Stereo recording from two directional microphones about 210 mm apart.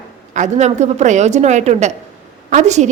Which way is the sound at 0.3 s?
35° right (ahead or behind).